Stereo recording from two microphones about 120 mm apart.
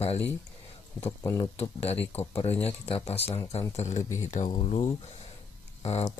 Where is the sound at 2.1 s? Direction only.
55° left (ahead or behind).